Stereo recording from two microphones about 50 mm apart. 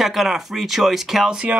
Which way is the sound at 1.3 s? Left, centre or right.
Centre.